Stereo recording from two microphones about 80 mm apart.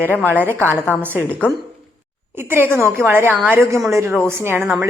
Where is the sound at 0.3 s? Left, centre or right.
Right.